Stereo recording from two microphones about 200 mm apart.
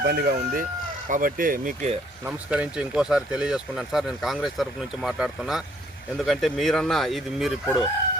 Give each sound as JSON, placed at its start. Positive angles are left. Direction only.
{"t": 0.0, "sound": "speech", "side_deg": -55}
{"t": 0.3, "sound": "speech", "side_deg": -40}
{"t": 2.2, "sound": "speech", "side_deg": -5}